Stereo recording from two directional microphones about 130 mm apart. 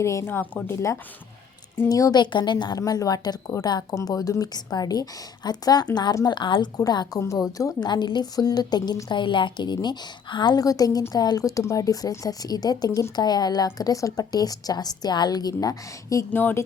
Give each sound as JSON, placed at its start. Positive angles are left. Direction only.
{"t": 0.0, "sound": "a woman's voice", "side_deg": 20}
{"t": 16.3, "sound": "speech", "side_deg": 15}